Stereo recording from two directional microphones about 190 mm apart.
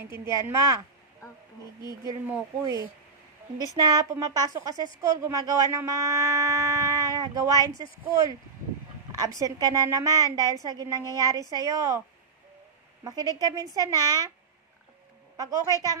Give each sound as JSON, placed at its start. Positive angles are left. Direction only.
{"t": 0.4, "sound": "speech", "side_deg": -15}
{"t": 1.8, "sound": "speech", "side_deg": 20}
{"t": 2.2, "sound": "a woman's voice", "side_deg": -15}
{"t": 9.4, "sound": "a woman's voice", "side_deg": -20}
{"t": 13.0, "sound": "a woman's voice", "side_deg": -20}
{"t": 15.3, "sound": "a woman's voice", "side_deg": -20}